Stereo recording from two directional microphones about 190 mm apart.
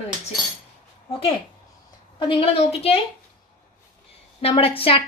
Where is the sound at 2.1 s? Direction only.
25° left (ahead or behind).